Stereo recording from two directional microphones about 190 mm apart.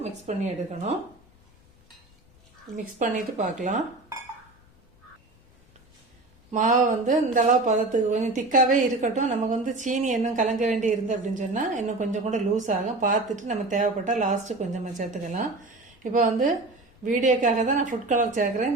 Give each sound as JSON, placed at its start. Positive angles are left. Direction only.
{"t": 0.0, "sound": "speech", "side_deg": -35}
{"t": 2.7, "sound": "speech", "side_deg": -40}
{"t": 6.5, "sound": "speech", "side_deg": -40}
{"t": 17.0, "sound": "a woman's voice", "side_deg": -40}